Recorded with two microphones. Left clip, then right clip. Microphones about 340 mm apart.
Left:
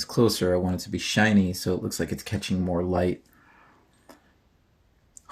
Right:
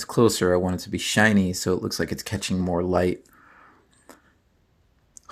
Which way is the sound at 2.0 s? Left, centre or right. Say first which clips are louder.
Right 3 dB; right.